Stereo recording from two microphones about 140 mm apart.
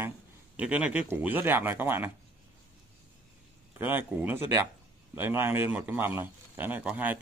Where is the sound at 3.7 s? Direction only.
15° right (ahead or behind).